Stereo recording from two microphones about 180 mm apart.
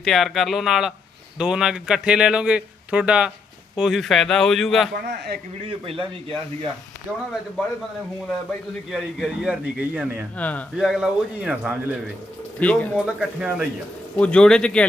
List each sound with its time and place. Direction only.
0.0 s speech: centre (ahead or behind)
5.0 s a man's voice: 60° right (ahead or behind)
5.6 s speech: 30° right (ahead or behind)
7.1 s speech: 15° right (ahead or behind)
8.9 s speech: centre (ahead or behind)
10.3 s speech: 10° left (ahead or behind)
12.5 s speech: 5° left (ahead or behind)
13.1 s speech: 5° right (ahead or behind)
14.2 s speech: 5° left (ahead or behind)